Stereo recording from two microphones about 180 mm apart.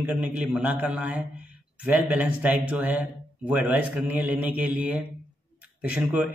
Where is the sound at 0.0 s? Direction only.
10° right (ahead or behind).